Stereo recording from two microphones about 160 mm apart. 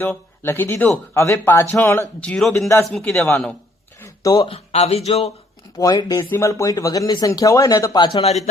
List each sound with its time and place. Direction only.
0.0 s speech: 15° left (ahead or behind)
2.6 s speech: 20° left (ahead or behind)
2.8 s a man's voice: 5° left (ahead or behind)
4.0 s a sound: 20° left (ahead or behind)
4.4 s speech: 40° left (ahead or behind)
5.7 s speech: 25° left (ahead or behind)
8.0 s speech: 35° left (ahead or behind)